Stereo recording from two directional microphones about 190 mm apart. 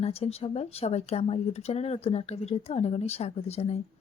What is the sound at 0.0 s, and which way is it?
Speech, 30° left (ahead or behind).